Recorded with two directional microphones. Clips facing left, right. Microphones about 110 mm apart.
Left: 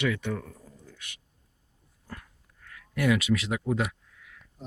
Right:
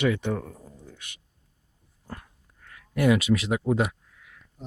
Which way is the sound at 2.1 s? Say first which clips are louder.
Right 3 dB; 25° right (ahead or behind).